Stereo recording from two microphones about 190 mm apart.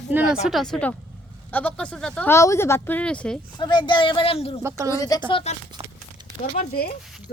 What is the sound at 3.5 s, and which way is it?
Speech, 25° left (ahead or behind).